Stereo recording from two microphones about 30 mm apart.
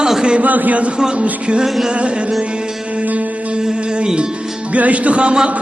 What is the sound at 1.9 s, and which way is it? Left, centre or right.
Music, right.